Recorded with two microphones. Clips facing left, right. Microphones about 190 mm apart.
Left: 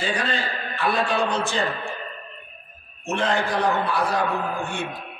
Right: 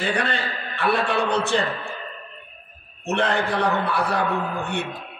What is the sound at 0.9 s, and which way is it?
Speech, 65° right (ahead or behind).